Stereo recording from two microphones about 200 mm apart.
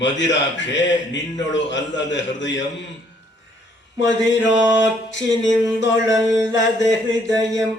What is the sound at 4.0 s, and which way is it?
Speech, 65° left (ahead or behind).